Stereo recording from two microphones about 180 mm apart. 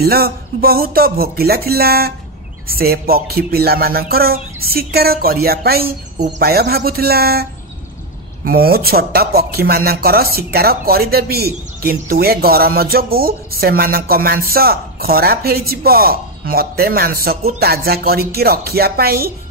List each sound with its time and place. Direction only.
0.0 s speech: 60° right (ahead or behind)
8.5 s speech: 55° right (ahead or behind)